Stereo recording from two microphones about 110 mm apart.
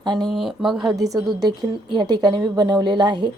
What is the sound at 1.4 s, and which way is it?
A woman's voice, 45° right (ahead or behind).